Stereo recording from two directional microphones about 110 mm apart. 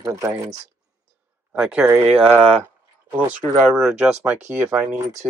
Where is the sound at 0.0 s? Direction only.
30° right (ahead or behind).